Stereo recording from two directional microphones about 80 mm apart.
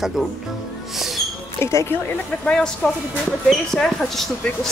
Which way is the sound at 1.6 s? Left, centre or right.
Left.